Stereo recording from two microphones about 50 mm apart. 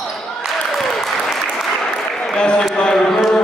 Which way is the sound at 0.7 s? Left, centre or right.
Centre.